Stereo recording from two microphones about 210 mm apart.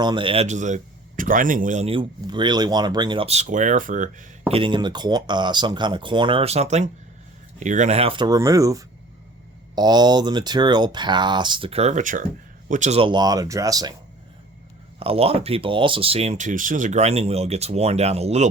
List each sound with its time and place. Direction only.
0.0 s a man's voice: 20° right (ahead or behind)
14.9 s a man's voice: 25° right (ahead or behind)